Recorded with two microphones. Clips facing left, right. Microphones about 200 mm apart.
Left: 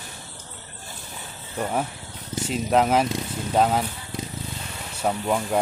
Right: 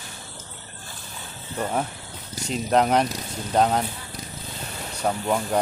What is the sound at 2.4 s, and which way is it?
Speech, 5° left (ahead or behind).